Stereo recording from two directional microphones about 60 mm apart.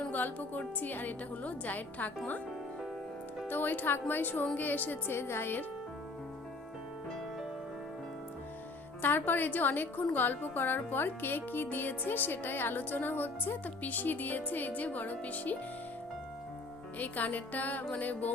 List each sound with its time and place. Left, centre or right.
0.1 s a woman's voice: left
3.4 s a woman's voice: left
9.0 s a woman's voice: left
17.0 s a woman's voice: left